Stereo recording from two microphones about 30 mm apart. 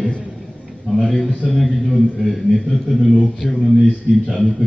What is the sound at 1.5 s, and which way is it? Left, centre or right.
A man's voice, centre.